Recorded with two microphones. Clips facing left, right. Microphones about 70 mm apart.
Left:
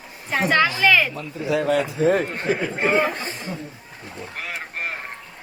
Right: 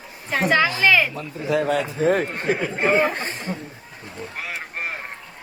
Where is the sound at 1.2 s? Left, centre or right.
Right.